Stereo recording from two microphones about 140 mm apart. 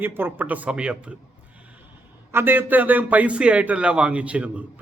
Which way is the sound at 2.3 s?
15° right (ahead or behind).